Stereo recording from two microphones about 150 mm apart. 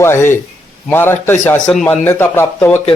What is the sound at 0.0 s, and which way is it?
Speech, 15° left (ahead or behind).